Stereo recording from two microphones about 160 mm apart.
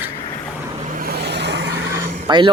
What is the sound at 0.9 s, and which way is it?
Vehicle, 80° right.